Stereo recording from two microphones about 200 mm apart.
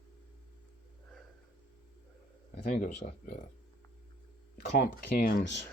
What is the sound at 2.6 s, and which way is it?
Speech, 45° left (ahead or behind).